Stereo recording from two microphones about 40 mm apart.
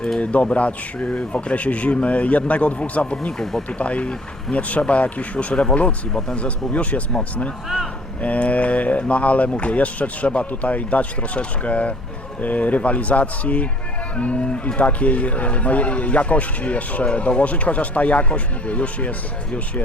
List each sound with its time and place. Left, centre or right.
0.2 s speech: left
3.3 s speech: centre
3.7 s speech: left
8.2 s speech: left